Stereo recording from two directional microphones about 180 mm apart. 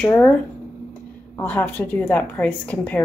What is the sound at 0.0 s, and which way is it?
Speech, 10° left (ahead or behind).